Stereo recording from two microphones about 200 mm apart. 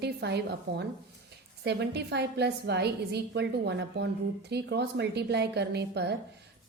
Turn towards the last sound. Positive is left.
turn(degrees=-55)  # may be behind; listen again after turning